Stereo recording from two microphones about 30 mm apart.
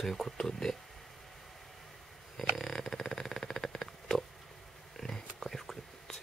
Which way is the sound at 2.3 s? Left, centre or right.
Centre.